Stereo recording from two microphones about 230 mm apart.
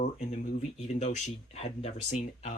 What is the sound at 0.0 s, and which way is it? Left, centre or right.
Speech, left.